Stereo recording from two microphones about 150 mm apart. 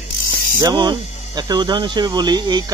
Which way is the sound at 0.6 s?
30° right (ahead or behind).